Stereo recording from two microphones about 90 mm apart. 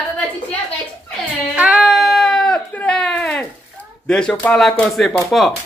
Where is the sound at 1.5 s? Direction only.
10° right (ahead or behind); by 3.4 s 10° left (ahead or behind).